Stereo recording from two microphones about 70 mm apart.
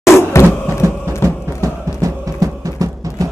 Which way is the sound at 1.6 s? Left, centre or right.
Right.